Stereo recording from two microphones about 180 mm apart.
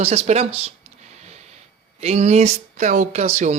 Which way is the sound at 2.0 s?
35° right (ahead or behind).